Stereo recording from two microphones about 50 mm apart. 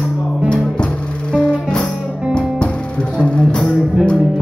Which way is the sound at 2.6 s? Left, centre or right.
Left.